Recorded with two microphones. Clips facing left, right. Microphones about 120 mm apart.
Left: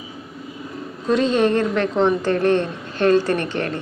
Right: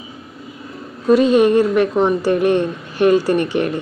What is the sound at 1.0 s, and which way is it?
A woman's voice, 10° right (ahead or behind).